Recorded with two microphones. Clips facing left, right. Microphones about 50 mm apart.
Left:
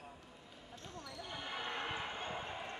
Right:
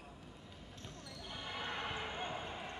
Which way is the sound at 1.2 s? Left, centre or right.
Centre.